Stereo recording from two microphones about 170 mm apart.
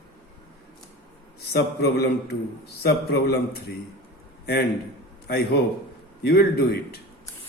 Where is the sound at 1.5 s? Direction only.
70° left (ahead or behind).